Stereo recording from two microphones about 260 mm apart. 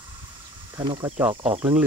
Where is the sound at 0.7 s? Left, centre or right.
Centre.